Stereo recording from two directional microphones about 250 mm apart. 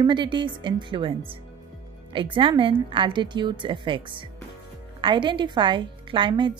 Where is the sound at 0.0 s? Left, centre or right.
Centre.